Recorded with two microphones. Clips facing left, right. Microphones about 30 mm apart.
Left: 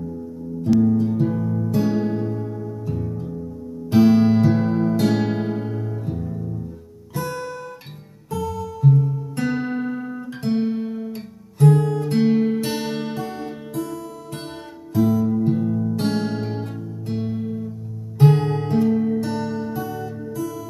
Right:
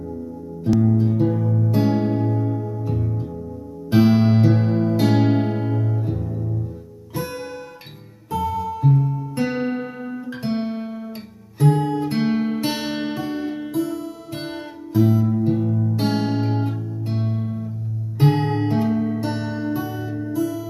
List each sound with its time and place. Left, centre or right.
0.7 s music: centre
1.7 s music: centre
7.2 s guitar: centre
8.3 s music: centre
9.3 s guitar: centre
11.5 s music: centre